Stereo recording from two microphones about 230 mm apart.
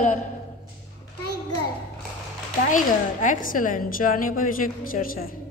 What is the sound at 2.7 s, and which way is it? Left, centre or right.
A woman's voice, left.